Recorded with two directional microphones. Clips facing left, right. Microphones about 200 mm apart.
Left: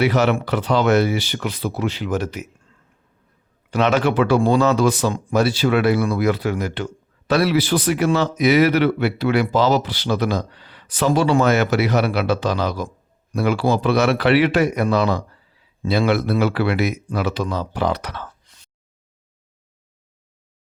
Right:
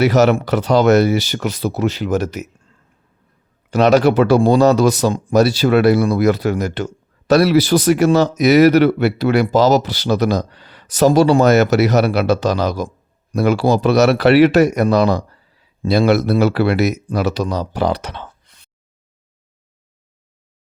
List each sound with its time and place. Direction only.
0.0 s speech: 40° right (ahead or behind)
3.7 s speech: 40° right (ahead or behind); by 18.3 s 25° right (ahead or behind)
18.4 s a sound: 60° right (ahead or behind)